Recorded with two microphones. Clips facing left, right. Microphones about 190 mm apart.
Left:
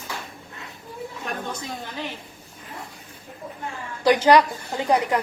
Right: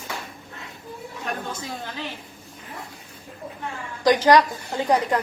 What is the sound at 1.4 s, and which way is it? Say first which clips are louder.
Speech: even; 15° left (ahead or behind).